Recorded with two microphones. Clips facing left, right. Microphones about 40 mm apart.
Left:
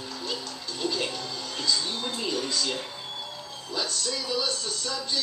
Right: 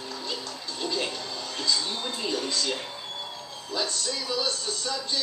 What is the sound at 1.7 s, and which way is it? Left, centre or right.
Television, centre.